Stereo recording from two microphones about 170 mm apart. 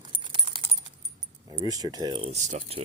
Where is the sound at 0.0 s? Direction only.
30° right (ahead or behind).